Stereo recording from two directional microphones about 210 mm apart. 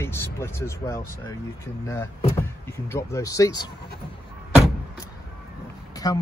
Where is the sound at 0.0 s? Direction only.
10° left (ahead or behind).